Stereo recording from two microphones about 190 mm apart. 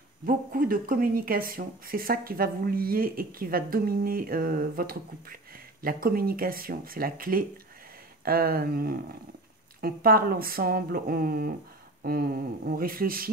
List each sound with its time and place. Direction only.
0.2 s speech: 45° right (ahead or behind)